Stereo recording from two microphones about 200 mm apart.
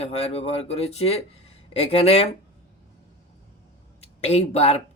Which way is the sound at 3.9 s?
30° left (ahead or behind).